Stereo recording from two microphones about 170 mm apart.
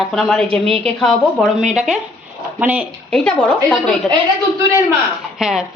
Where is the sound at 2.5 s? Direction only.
10° right (ahead or behind).